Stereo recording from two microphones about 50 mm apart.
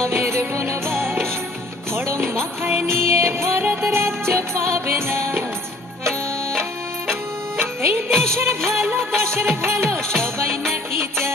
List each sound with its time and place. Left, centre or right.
0.1 s music: right
2.0 s music: right
2.6 s music: right
3.6 s music: right
3.9 s music: right
8.1 s music: centre
8.4 s music: right